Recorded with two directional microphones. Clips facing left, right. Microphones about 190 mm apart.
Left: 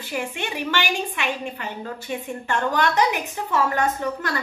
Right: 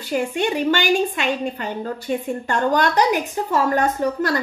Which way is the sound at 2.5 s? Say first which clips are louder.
Right 3 dB; 35° right (ahead or behind).